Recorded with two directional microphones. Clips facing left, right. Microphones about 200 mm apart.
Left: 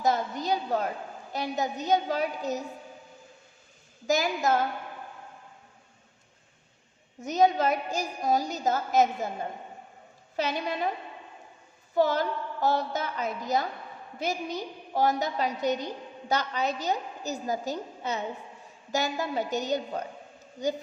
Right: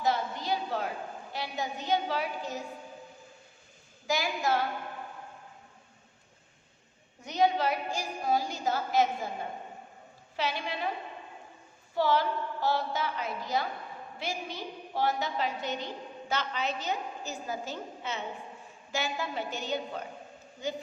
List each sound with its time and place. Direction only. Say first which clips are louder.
0.0 s a sound: left 3 dB; 45° left (ahead or behind)
1.3 s a woman's voice: left 6 dB; 45° left (ahead or behind)
4.0 s a woman's voice: left 4 dB; 45° left (ahead or behind)
7.2 s a woman's voice: left 4 dB; 45° left (ahead or behind)
10.3 s a woman's voice: left 4 dB; 45° left (ahead or behind)
11.9 s a woman's voice: left 2 dB; 45° left (ahead or behind)